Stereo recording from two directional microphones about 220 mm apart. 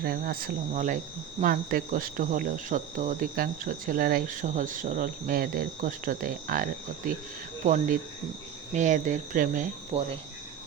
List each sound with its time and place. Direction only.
0.0 s speech: 45° right (ahead or behind)